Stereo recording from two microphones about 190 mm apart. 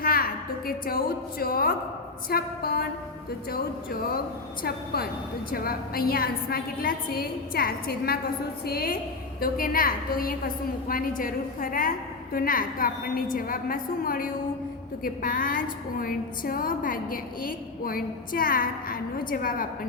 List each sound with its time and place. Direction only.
0.0 s a sound: 50° left (ahead or behind)
0.7 s a woman's voice: 50° left (ahead or behind)
5.5 s a woman's voice: 50° left (ahead or behind)